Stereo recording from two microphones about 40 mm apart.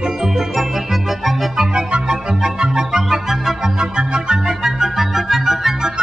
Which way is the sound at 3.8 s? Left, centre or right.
Right.